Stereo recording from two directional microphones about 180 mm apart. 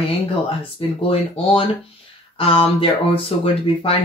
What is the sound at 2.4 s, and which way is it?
Speech, 30° left (ahead or behind).